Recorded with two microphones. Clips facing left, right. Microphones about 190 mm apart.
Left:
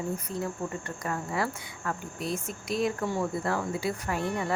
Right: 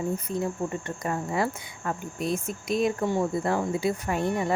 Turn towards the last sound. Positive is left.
turn(degrees=-20)  # may be behind; listen again after turning